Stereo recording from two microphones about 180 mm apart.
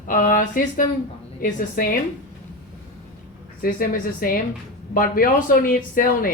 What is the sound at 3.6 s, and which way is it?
Speech, 55° left (ahead or behind).